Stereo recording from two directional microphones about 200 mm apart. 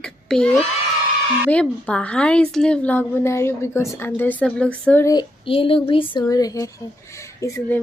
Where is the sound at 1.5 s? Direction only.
5° left (ahead or behind).